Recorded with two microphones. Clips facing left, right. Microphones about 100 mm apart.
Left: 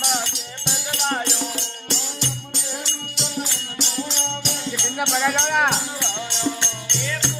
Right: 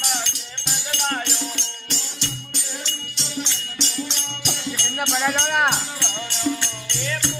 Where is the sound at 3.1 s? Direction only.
5° left (ahead or behind).